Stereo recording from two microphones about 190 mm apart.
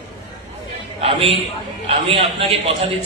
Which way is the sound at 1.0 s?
30° right (ahead or behind).